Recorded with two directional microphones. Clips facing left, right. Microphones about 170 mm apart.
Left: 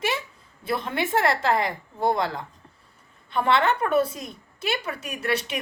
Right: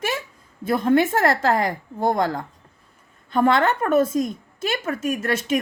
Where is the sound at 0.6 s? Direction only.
45° right (ahead or behind).